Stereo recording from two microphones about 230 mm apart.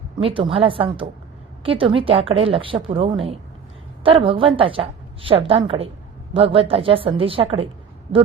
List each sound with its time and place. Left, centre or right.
0.2 s a woman's voice: right